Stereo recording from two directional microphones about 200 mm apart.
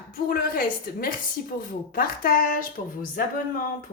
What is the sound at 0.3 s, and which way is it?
Speech, 45° left (ahead or behind).